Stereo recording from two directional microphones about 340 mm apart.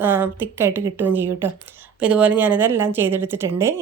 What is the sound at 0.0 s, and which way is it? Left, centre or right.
A woman's voice, centre.